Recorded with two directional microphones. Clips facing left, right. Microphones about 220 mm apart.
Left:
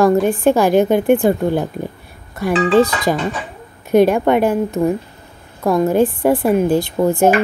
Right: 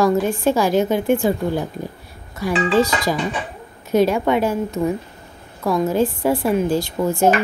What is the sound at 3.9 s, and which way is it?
A woman's voice, 55° left (ahead or behind).